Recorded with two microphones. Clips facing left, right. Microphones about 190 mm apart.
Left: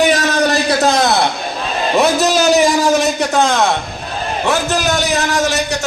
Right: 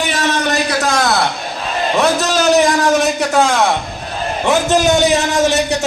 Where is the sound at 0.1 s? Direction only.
40° left (ahead or behind).